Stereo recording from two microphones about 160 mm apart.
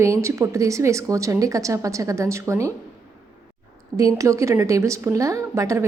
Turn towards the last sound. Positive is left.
turn(degrees=-20)  # may be behind; listen again after turning